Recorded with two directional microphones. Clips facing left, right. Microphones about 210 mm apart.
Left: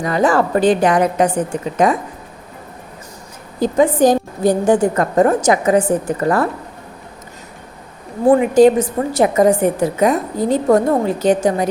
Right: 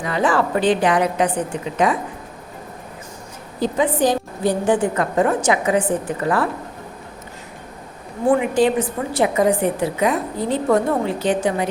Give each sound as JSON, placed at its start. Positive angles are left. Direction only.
{"t": 0.0, "sound": "a woman's voice", "side_deg": 40}
{"t": 3.6, "sound": "a woman's voice", "side_deg": 45}
{"t": 8.3, "sound": "a woman's voice", "side_deg": 40}